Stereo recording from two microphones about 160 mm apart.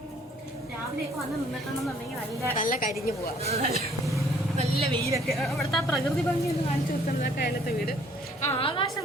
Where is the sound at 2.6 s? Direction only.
60° left (ahead or behind).